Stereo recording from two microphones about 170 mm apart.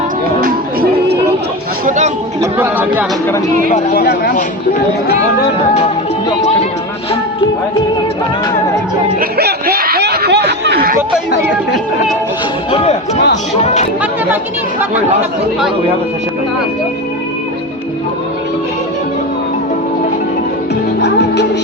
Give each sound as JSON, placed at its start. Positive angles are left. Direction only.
{"t": 0.4, "sound": "music", "side_deg": -65}
{"t": 1.8, "sound": "chatter", "side_deg": -45}
{"t": 2.4, "sound": "speech", "side_deg": -10}
{"t": 3.7, "sound": "speech", "side_deg": 65}
{"t": 9.4, "sound": "snicker", "side_deg": -65}
{"t": 12.7, "sound": "speech", "side_deg": 35}
{"t": 21.0, "sound": "music", "side_deg": 90}